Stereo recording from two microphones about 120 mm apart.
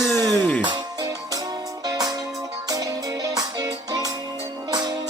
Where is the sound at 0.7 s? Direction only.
30° right (ahead or behind).